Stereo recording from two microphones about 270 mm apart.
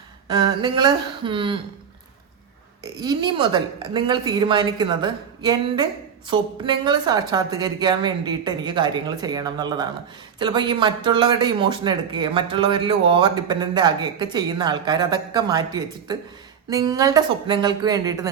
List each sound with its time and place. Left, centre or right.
0.3 s a woman's voice: centre
2.8 s a woman's voice: centre